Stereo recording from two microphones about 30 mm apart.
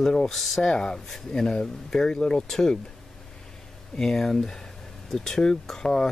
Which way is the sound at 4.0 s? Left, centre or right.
Centre.